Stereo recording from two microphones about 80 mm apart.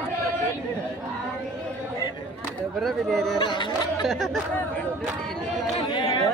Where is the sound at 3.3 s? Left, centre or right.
Left.